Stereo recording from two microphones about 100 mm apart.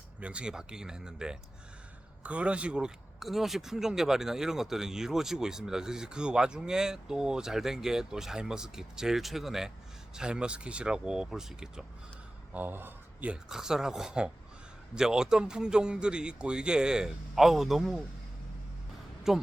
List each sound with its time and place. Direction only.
0.2 s a man's voice: 10° right (ahead or behind)
12.5 s speech: 20° right (ahead or behind)
13.3 s a man's voice: 5° right (ahead or behind)
19.3 s speech: 5° right (ahead or behind)